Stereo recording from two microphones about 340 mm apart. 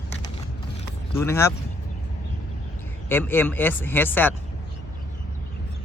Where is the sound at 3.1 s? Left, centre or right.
Centre.